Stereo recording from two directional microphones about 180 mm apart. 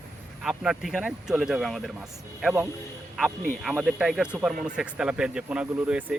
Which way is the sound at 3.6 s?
5° right (ahead or behind).